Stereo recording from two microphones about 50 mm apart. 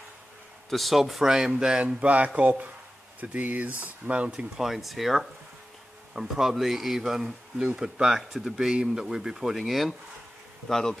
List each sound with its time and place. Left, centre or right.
0.7 s speech: centre; by 4.5 s right
4.6 s speech: centre
10.7 s insect: centre